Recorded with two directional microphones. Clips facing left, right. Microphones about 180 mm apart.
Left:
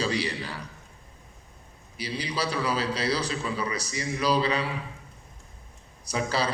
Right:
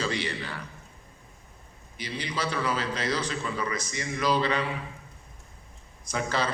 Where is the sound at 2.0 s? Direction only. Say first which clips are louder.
Left 2 dB; 35° left (ahead or behind).